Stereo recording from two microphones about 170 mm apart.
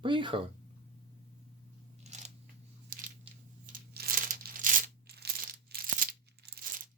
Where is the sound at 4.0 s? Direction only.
55° right (ahead or behind).